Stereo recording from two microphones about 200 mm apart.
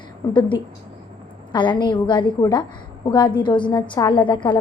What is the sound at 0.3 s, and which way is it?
A woman's voice, 25° left (ahead or behind).